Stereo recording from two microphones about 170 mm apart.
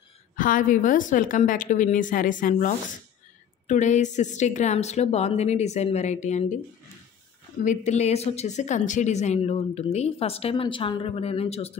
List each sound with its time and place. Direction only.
0.4 s speech: 50° left (ahead or behind)
7.6 s speech: 45° left (ahead or behind)